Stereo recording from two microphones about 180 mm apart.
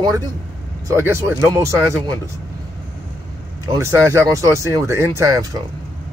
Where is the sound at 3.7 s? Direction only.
15° right (ahead or behind).